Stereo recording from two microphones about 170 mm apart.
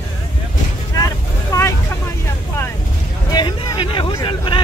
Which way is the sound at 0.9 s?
20° left (ahead or behind).